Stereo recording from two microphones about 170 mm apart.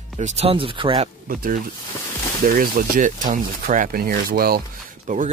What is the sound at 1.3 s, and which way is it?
Speech, 55° right (ahead or behind).